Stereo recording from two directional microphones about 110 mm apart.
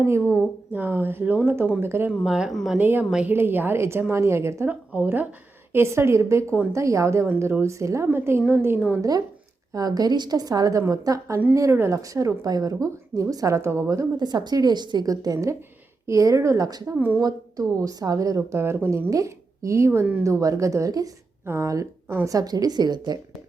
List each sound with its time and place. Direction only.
0.0 s a woman's voice: 25° right (ahead or behind)
2.2 s speech: 5° right (ahead or behind)
2.7 s a woman's voice: 15° right (ahead or behind)
9.0 s a woman's voice: 35° right (ahead or behind)
14.2 s a woman's voice: 40° right (ahead or behind)
16.9 s speech: 15° right (ahead or behind)
17.2 s a woman's voice: 35° right (ahead or behind); by 20.2 s 20° right (ahead or behind)
20.2 s a woman's voice: 30° right (ahead or behind)